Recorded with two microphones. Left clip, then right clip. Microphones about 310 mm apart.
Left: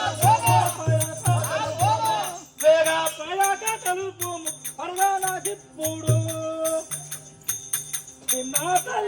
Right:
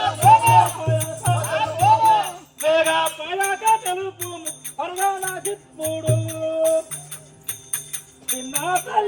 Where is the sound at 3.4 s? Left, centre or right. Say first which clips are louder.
Right 6 dB; centre.